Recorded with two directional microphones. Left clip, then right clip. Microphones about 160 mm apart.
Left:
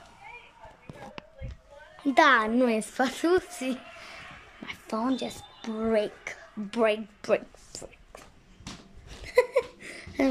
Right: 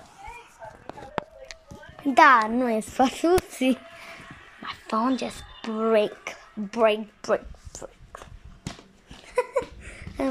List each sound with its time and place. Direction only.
2.0 s a woman's voice: centre (ahead or behind)
3.0 s a woman's voice: 5° right (ahead or behind)
3.4 s speech: 20° right (ahead or behind)
4.8 s a woman's voice: centre (ahead or behind)
9.2 s a sound: 20° left (ahead or behind)